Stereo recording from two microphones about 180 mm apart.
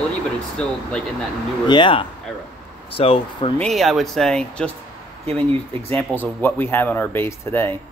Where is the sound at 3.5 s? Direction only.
Centre (ahead or behind).